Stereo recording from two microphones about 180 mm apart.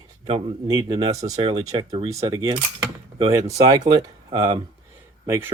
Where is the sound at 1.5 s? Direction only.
35° right (ahead or behind).